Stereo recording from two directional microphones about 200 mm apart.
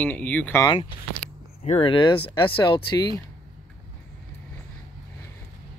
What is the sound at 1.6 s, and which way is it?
Speech, 30° left (ahead or behind).